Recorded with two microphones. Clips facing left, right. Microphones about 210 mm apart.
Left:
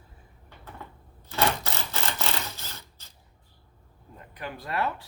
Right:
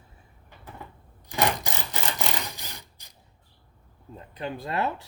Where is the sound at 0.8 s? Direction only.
15° right (ahead or behind).